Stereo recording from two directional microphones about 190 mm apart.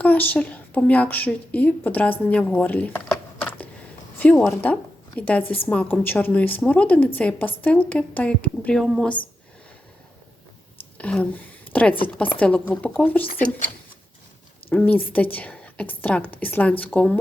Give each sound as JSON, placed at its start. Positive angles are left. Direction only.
{"t": 0.0, "sound": "a woman's voice", "side_deg": 10}
{"t": 10.9, "sound": "a woman's voice", "side_deg": 5}
{"t": 13.2, "sound": "speech", "side_deg": 50}
{"t": 14.7, "sound": "a woman's voice", "side_deg": 10}